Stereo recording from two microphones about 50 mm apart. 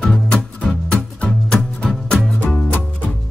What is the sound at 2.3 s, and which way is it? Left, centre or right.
Music, left.